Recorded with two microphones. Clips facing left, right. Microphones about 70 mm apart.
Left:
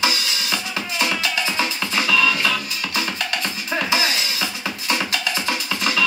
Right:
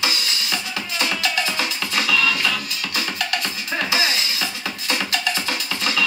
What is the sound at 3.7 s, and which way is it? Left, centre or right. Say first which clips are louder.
Music: left 1 dB; left.